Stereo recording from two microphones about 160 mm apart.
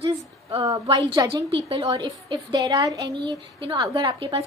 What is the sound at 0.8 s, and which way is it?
A woman's voice, 25° right (ahead or behind).